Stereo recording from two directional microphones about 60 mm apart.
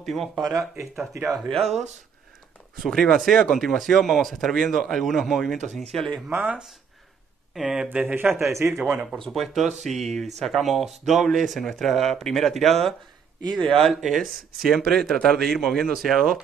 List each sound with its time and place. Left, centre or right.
0.0 s speech: centre
1.5 s a man's voice: centre
6.3 s speech: right
7.5 s speech: centre
7.9 s speech: right
8.9 s speech: centre
9.3 s speech: centre
14.9 s a man's voice: centre